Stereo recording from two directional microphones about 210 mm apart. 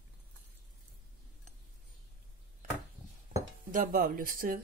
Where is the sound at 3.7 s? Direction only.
40° right (ahead or behind).